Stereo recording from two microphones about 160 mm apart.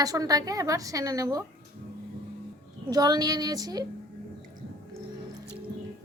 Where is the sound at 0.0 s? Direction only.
20° right (ahead or behind).